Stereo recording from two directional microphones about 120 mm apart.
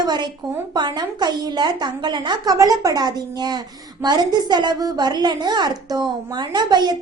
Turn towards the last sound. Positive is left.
turn(degrees=-35)  # may be behind; listen again after turning